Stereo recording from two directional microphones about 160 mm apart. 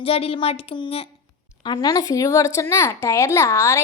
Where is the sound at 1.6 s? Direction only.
25° left (ahead or behind).